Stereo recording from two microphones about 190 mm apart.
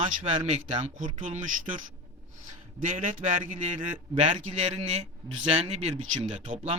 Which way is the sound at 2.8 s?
40° right (ahead or behind).